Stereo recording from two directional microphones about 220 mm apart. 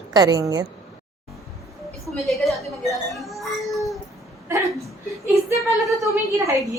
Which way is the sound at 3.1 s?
Centre (ahead or behind).